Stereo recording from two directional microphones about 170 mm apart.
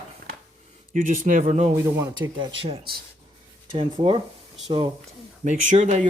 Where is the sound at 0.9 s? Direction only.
55° right (ahead or behind).